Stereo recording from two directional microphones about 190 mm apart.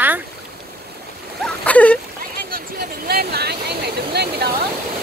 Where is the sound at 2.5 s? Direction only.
55° right (ahead or behind).